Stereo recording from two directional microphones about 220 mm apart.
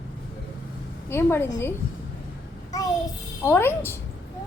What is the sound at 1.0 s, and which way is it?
Speech, 10° left (ahead or behind).